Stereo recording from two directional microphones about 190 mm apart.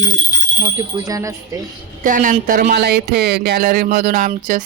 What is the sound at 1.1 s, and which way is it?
Speech, 15° right (ahead or behind).